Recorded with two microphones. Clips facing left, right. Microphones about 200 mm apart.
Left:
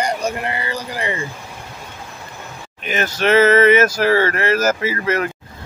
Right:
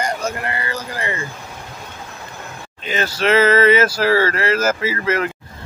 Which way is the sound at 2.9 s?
20° left (ahead or behind).